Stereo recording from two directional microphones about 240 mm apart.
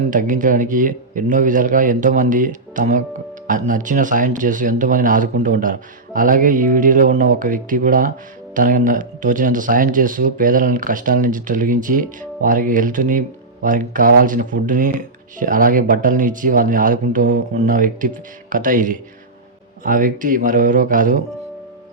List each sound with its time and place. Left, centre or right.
0.1 s a man's voice: right